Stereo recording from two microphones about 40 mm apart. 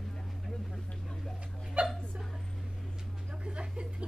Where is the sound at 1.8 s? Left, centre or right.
Right.